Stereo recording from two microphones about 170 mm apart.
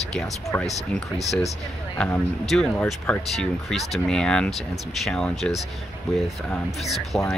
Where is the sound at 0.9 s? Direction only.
Centre (ahead or behind).